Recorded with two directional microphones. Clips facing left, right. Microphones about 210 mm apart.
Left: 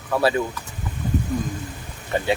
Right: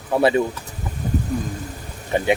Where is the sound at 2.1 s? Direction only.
20° right (ahead or behind).